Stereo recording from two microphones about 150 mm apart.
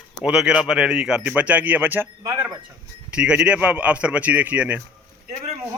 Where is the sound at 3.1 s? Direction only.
5° right (ahead or behind).